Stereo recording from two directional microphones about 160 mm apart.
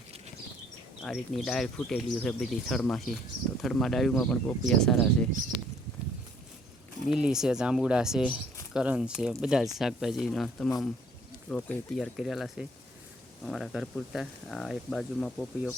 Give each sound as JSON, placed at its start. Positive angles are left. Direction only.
{"t": 1.0, "sound": "speech", "side_deg": 0}
{"t": 7.1, "sound": "speech", "side_deg": -5}